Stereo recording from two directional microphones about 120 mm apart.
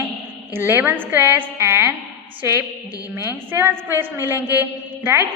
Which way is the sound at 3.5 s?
20° right (ahead or behind).